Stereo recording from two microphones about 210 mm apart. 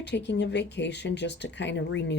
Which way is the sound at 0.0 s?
55° left (ahead or behind).